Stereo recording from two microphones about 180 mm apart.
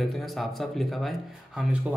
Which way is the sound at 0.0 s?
Centre (ahead or behind).